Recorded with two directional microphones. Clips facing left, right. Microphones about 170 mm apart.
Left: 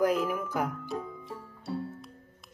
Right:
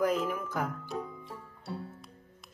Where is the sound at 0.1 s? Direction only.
10° left (ahead or behind).